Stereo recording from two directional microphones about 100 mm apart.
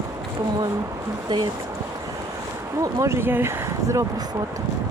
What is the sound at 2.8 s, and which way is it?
Speech, 30° right (ahead or behind).